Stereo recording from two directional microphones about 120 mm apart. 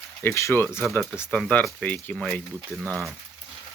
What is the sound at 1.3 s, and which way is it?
Speech, 10° left (ahead or behind).